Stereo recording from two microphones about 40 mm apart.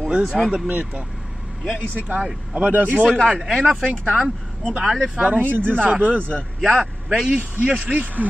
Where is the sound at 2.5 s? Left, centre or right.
Right.